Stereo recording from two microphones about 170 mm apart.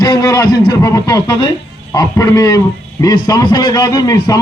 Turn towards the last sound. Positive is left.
turn(degrees=20)  # may be behind; listen again after turning